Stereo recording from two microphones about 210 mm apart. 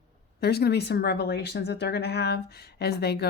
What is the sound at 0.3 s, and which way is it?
Speech, 50° left (ahead or behind).